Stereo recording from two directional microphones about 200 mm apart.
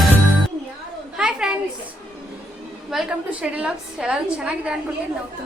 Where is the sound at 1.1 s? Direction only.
5° right (ahead or behind).